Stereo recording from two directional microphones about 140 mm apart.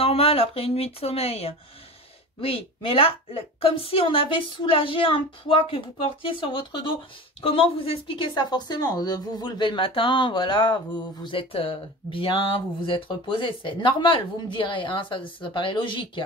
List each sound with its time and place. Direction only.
0.0 s speech: 45° left (ahead or behind)